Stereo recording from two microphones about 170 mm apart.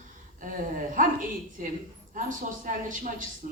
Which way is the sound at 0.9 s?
50° right (ahead or behind).